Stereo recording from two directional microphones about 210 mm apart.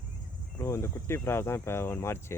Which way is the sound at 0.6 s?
15° left (ahead or behind).